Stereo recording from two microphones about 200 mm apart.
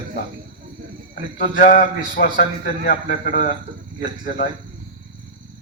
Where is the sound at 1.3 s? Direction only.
40° left (ahead or behind).